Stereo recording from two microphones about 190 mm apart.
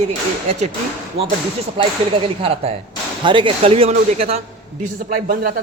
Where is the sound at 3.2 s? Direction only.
25° right (ahead or behind).